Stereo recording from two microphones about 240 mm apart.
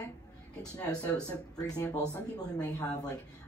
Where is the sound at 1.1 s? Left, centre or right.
Centre.